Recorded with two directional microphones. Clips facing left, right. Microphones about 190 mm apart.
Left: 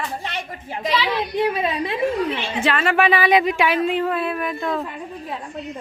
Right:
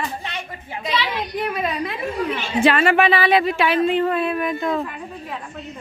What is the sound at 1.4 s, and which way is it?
A woman's voice, 25° left (ahead or behind).